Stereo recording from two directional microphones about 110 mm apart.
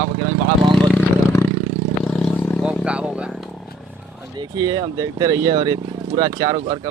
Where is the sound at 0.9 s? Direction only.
25° left (ahead or behind).